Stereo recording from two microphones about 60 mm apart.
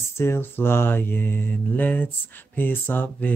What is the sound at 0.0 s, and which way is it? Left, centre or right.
Mantra, left.